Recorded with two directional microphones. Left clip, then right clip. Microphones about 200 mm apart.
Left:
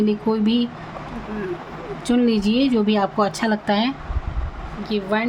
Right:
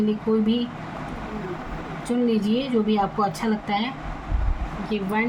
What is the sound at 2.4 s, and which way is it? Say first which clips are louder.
Speech: left 4 dB; 55° left (ahead or behind).